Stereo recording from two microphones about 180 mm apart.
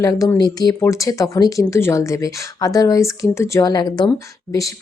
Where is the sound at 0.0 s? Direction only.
20° left (ahead or behind).